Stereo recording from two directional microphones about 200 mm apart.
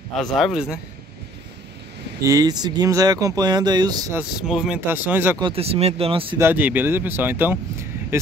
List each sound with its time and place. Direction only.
0.2 s speech: centre (ahead or behind)
2.2 s speech: 20° right (ahead or behind)
4.2 s speech: 5° right (ahead or behind)
5.4 s speech: 30° right (ahead or behind)
6.3 s speech: 10° right (ahead or behind)